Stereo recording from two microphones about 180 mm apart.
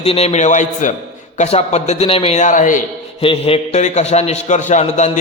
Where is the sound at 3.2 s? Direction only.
30° left (ahead or behind).